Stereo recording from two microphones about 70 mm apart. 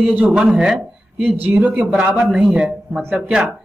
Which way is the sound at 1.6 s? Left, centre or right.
Centre.